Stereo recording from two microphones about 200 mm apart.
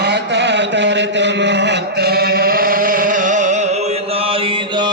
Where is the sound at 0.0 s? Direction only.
60° right (ahead or behind).